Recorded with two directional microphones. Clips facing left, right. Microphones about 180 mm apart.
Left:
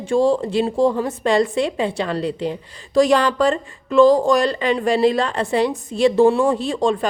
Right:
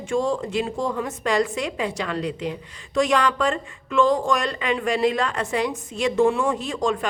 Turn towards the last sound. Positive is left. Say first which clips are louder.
# left 5 dB
turn(degrees=30)  # may be behind; listen again after turning